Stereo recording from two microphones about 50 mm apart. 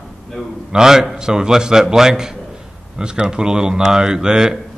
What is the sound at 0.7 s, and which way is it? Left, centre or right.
A man's voice, centre.